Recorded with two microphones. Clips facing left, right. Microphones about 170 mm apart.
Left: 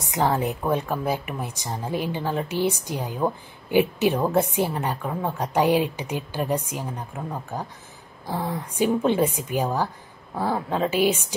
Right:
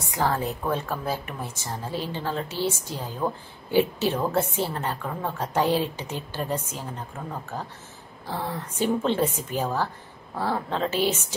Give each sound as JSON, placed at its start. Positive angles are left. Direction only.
{"t": 0.0, "sound": "a woman's voice", "side_deg": 20}